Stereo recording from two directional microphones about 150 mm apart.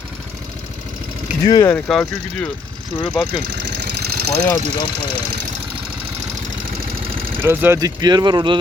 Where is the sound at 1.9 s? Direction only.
Centre (ahead or behind).